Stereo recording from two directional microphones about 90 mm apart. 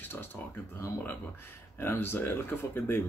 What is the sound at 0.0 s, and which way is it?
Speech, 25° left (ahead or behind).